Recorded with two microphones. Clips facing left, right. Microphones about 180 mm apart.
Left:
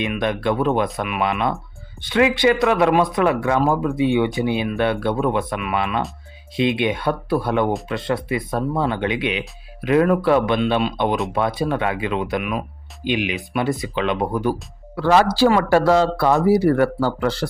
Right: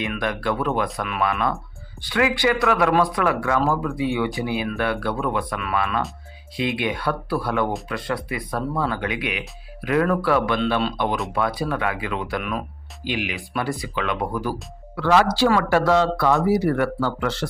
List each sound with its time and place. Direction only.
0.0 s speech: 20° left (ahead or behind)
12.4 s speech: 10° left (ahead or behind)
13.1 s speech: 20° left (ahead or behind)
14.9 s speech: 40° left (ahead or behind)